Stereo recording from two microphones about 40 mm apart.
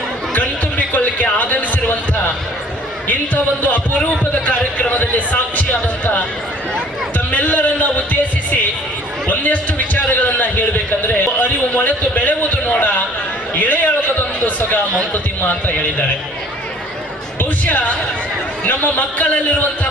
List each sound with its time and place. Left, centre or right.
0.9 s speech: left
3.1 s a man's voice: left
7.3 s a man's voice: left
17.7 s a man's voice: left